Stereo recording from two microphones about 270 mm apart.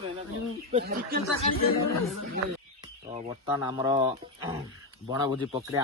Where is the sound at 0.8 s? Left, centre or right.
Right.